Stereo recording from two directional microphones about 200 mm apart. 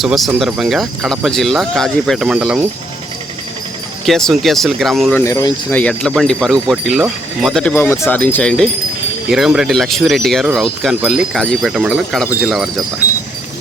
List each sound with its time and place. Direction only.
0.0 s speech: centre (ahead or behind)
4.0 s speech: centre (ahead or behind)
5.2 s speech: 15° left (ahead or behind)
5.8 s speech: 5° left (ahead or behind)